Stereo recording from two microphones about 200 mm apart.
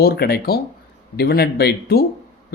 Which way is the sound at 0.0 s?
50° left (ahead or behind).